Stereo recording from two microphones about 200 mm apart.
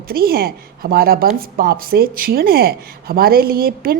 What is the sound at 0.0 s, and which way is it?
A woman's voice, 50° right (ahead or behind).